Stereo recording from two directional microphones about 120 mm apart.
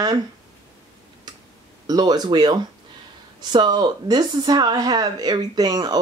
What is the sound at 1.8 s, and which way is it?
Speech, 35° right (ahead or behind).